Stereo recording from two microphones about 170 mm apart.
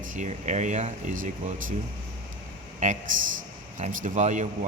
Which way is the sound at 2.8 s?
45° right (ahead or behind).